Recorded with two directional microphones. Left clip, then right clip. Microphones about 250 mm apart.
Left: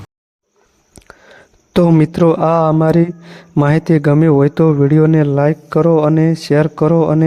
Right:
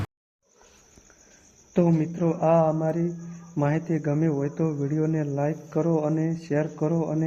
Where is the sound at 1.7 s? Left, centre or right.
Left.